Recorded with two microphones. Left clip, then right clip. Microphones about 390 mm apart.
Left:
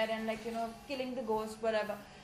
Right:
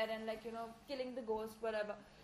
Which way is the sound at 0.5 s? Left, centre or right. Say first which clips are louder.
Left 7 dB; right.